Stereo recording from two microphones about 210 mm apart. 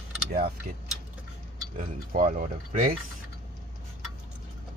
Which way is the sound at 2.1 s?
40° right (ahead or behind).